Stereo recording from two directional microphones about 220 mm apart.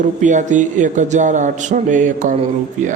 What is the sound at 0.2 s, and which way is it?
A man's voice, 35° right (ahead or behind).